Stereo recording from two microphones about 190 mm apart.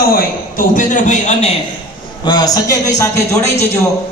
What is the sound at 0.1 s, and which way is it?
A man's voice, 45° left (ahead or behind).